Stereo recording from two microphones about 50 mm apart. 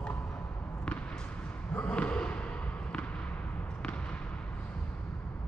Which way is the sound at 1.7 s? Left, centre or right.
Left.